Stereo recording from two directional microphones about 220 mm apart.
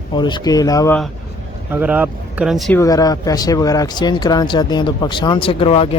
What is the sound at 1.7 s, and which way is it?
Speech, 5° right (ahead or behind).